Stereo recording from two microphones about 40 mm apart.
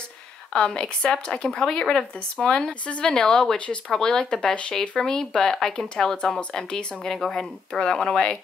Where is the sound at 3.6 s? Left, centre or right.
Left.